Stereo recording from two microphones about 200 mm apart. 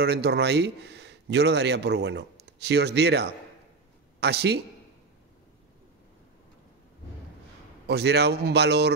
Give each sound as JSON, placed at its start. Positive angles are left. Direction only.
{"t": 0.0, "sound": "a man's voice", "side_deg": -55}
{"t": 7.8, "sound": "a man's voice", "side_deg": -55}